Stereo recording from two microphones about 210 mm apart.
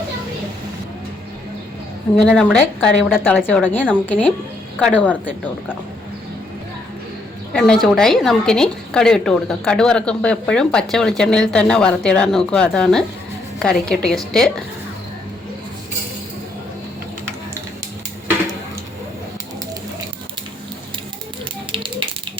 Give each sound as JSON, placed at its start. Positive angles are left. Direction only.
{"t": 2.1, "sound": "a woman's voice", "side_deg": 5}
{"t": 7.5, "sound": "a woman's voice", "side_deg": 0}
{"t": 21.7, "sound": "a sound", "side_deg": -25}